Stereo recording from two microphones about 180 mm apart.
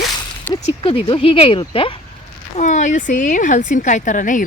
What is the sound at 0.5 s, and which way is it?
Speech, 30° left (ahead or behind).